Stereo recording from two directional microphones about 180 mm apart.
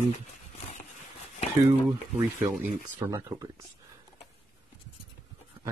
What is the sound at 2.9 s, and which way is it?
Speech, 15° right (ahead or behind).